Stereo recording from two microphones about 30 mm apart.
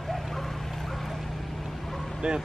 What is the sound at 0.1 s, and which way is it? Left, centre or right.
Dog, centre.